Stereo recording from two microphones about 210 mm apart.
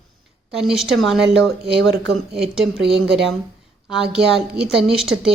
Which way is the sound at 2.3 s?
Centre (ahead or behind).